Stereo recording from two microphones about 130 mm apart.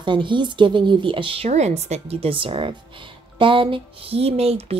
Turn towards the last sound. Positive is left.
turn(degrees=-50)  # may be behind; listen again after turning